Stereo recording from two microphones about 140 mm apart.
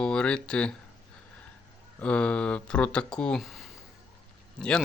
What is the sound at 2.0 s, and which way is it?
Speech, 10° left (ahead or behind).